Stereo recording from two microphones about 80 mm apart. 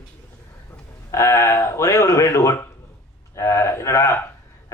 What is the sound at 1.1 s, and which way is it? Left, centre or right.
A man's voice, left.